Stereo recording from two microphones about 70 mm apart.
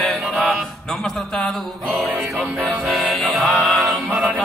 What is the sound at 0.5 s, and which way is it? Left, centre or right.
A man's voice, centre.